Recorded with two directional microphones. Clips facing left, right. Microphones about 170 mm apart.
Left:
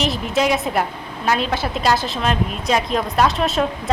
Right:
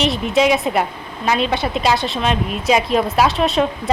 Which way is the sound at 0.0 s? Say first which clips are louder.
Right 3 dB; centre (ahead or behind).